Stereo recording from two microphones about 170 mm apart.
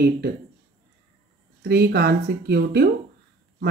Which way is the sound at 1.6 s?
75° right (ahead or behind).